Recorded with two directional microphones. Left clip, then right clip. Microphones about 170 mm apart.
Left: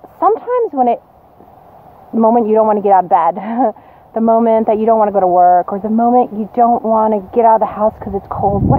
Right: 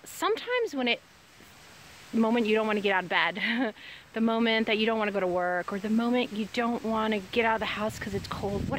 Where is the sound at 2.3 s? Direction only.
10° right (ahead or behind).